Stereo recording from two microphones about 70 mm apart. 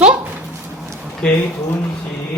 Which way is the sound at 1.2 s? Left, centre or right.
Centre.